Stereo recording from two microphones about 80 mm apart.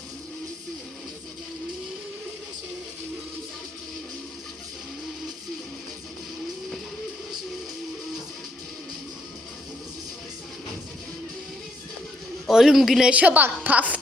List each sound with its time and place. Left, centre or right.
12.5 s a man's voice: centre
13.1 s a woman's voice: centre